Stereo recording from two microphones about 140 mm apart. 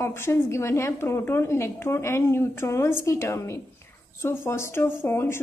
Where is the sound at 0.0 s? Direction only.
20° left (ahead or behind).